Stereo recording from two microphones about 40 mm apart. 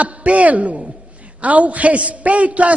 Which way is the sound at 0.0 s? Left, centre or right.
Right.